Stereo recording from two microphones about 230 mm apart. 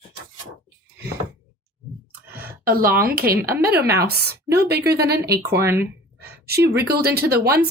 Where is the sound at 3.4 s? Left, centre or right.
Centre.